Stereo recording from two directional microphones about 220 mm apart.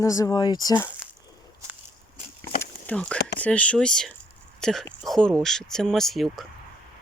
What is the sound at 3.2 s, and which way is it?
Speech, 50° left (ahead or behind).